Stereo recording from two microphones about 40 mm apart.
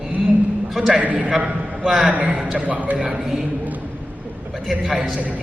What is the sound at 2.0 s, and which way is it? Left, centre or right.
Speech, right.